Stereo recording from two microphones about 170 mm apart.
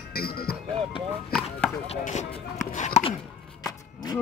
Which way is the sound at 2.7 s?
45° left (ahead or behind).